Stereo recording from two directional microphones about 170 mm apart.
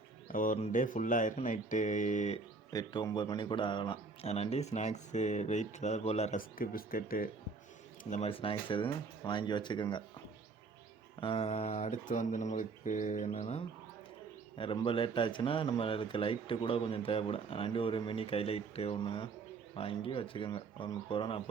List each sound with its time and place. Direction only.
0.3 s speech: 50° left (ahead or behind)
2.7 s speech: 25° left (ahead or behind)
4.3 s speech: 40° left (ahead or behind)
6.6 s speech: 55° left (ahead or behind)
8.1 s speech: 35° left (ahead or behind)
11.2 s speech: 35° left (ahead or behind)
14.8 s speech: 30° left (ahead or behind)